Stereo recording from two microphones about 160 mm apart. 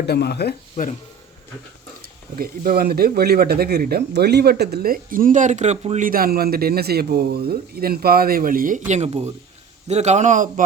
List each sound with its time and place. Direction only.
0.0 s speech: 85° left
2.4 s speech: 65° right (ahead or behind); by 6.1 s 45° right (ahead or behind)
6.1 s a man's voice: 70° right (ahead or behind); by 10.5 s 50° right (ahead or behind)